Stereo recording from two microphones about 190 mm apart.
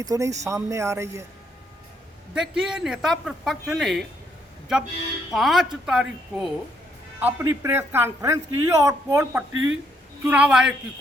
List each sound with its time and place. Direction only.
0.0 s speech: 20° right (ahead or behind)
2.3 s speech: 5° right (ahead or behind)
5.3 s speech: centre (ahead or behind)
9.5 s speech: 90° right
10.2 s speech: 5° right (ahead or behind)